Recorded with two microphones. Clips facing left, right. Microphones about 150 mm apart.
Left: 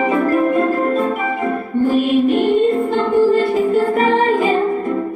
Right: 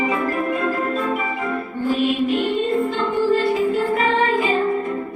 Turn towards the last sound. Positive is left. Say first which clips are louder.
# left 3 dB
turn(degrees=45)  # may be behind; listen again after turning